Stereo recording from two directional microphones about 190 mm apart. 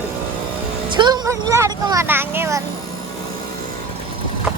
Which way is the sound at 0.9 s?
20° right (ahead or behind).